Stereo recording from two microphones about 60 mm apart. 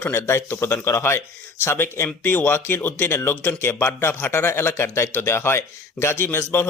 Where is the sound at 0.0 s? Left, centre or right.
Left.